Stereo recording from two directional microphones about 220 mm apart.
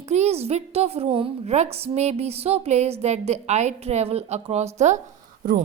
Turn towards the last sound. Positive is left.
turn(degrees=-40)  # may be behind; listen again after turning